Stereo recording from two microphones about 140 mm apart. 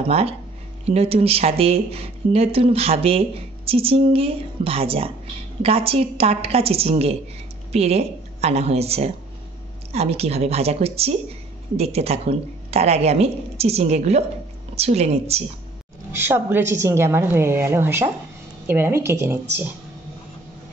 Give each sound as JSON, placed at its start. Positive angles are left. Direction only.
{"t": 0.0, "sound": "speech", "side_deg": -45}
{"t": 16.1, "sound": "a woman's voice", "side_deg": -15}